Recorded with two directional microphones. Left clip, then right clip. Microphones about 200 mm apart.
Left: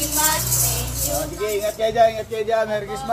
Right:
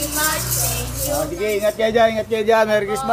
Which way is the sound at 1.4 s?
45° right (ahead or behind).